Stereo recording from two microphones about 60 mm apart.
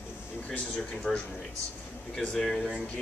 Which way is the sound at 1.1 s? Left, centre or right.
Centre.